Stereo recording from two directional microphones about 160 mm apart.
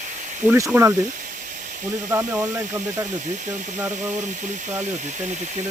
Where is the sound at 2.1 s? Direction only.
15° right (ahead or behind).